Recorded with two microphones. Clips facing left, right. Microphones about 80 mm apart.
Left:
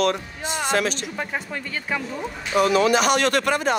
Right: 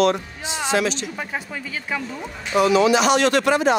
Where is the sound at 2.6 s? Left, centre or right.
Left.